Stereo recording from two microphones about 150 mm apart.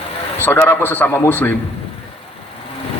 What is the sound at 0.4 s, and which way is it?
A man's voice, 15° left (ahead or behind).